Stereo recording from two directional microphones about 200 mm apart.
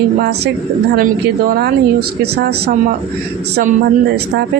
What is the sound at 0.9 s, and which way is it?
A woman's voice, 45° right (ahead or behind).